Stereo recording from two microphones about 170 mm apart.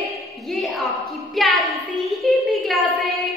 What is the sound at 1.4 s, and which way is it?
A woman's voice, centre (ahead or behind).